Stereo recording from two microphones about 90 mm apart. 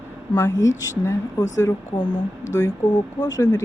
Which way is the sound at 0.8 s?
40° left (ahead or behind).